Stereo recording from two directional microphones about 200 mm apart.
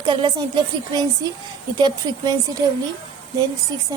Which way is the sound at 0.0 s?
25° right (ahead or behind).